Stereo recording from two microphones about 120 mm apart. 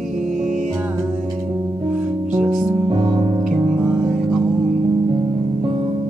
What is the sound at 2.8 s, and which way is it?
Music, 45° right (ahead or behind).